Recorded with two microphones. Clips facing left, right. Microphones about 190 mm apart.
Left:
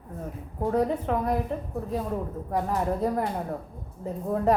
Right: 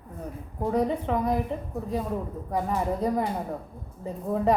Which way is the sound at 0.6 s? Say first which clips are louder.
Even; centre (ahead or behind).